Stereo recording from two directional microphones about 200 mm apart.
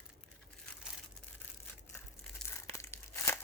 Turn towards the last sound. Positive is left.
turn(degrees=15)  # may be behind; listen again after turning